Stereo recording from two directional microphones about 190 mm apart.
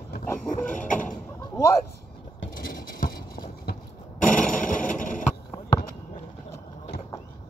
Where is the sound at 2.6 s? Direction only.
50° left (ahead or behind).